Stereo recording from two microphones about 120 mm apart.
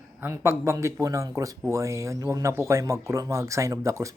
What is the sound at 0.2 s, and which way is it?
Speech, 20° right (ahead or behind).